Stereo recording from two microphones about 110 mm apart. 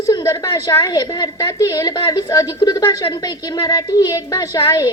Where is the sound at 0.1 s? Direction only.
35° left (ahead or behind).